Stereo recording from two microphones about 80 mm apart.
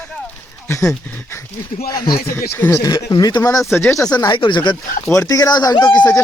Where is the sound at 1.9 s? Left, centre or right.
Left.